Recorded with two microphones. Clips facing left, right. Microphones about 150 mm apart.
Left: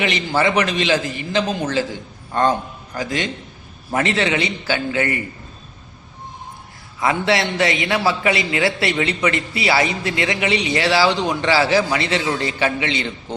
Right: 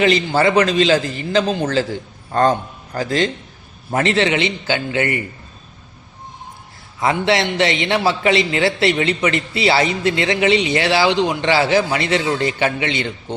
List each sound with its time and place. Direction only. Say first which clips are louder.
0.0 s a man's voice: right 4 dB; 30° right (ahead or behind)
7.0 s a man's voice: right 2 dB; 25° right (ahead or behind)